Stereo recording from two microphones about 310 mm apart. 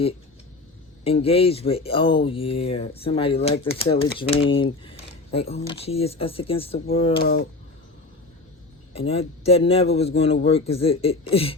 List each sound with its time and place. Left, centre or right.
1.0 s speech: centre
8.9 s speech: centre